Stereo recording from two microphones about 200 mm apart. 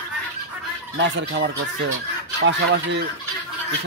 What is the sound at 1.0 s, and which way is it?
Speech, 60° right (ahead or behind).